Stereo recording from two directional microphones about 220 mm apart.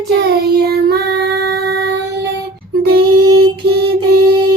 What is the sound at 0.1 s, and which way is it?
Child singing, 45° right (ahead or behind).